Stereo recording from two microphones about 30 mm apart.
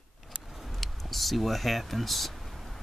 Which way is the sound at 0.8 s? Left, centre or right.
Centre.